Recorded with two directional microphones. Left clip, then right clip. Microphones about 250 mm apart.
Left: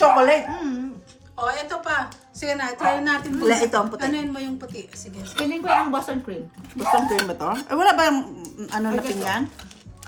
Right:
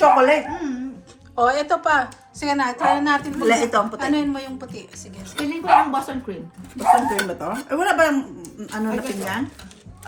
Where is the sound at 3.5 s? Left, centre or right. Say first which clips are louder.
Right 1 dB; left.